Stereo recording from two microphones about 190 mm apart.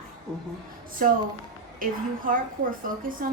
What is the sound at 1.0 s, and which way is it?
Speech, 45° right (ahead or behind).